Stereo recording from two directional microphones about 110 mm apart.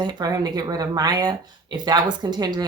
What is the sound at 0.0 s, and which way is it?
Speech, 40° right (ahead or behind).